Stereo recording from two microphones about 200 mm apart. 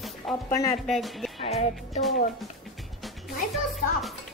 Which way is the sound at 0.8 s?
Centre (ahead or behind).